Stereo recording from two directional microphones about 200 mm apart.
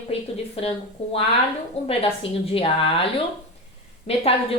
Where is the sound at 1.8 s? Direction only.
30° left (ahead or behind).